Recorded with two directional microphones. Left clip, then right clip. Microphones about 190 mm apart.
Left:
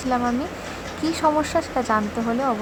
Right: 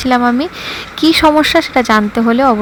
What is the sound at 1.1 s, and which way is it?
Speech, 40° right (ahead or behind).